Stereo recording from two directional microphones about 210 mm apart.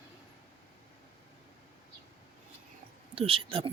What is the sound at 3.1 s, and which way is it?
Speech, 25° right (ahead or behind).